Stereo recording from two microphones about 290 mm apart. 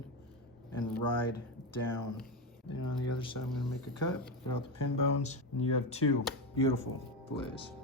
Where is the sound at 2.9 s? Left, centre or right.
Left.